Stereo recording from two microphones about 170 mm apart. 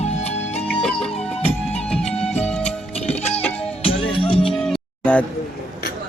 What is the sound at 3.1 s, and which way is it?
Music, 40° left (ahead or behind).